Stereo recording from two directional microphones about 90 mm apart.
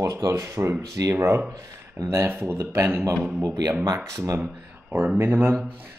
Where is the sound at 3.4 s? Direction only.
45° right (ahead or behind).